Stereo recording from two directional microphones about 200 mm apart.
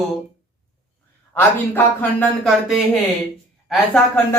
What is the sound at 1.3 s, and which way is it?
Speech, 10° left (ahead or behind).